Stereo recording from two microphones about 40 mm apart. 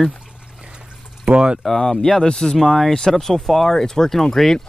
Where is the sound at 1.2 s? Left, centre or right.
Right.